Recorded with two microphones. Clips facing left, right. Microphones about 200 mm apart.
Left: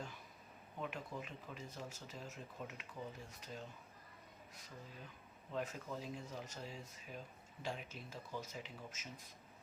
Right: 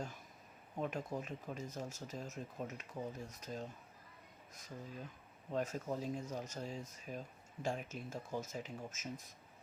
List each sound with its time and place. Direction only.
0.8 s speech: 40° right (ahead or behind)
5.5 s speech: 40° right (ahead or behind)